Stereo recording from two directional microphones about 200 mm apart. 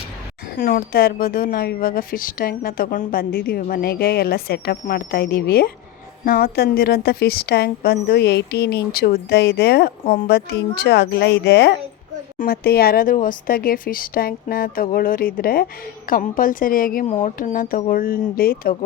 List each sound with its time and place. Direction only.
0.5 s a woman's voice: 45° left (ahead or behind)
17.1 s a sound: 30° left (ahead or behind)
17.3 s a woman's voice: 45° left (ahead or behind)